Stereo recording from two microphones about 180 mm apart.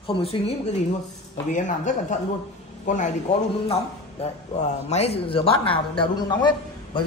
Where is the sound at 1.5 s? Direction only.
45° left (ahead or behind).